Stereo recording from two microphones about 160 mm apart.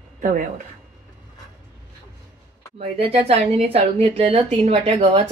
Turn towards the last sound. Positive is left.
turn(degrees=-35)  # may be behind; listen again after turning